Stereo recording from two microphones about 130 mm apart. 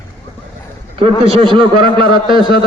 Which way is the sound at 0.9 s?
50° right (ahead or behind).